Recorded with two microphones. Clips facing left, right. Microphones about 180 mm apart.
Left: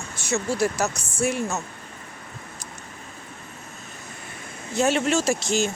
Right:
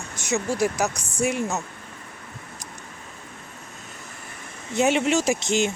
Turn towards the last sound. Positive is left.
turn(degrees=-20)  # may be behind; listen again after turning